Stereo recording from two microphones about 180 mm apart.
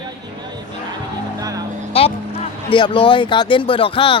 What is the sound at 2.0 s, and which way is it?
Speech, 30° left (ahead or behind).